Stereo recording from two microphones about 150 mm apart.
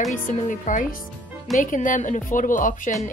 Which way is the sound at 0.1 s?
60° left (ahead or behind).